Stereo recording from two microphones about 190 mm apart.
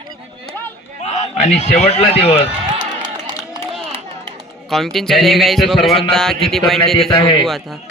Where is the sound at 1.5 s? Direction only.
35° left (ahead or behind).